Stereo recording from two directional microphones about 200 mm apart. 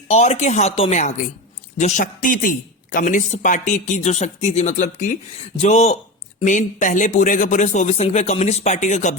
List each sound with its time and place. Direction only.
0.1 s speech: 35° left (ahead or behind)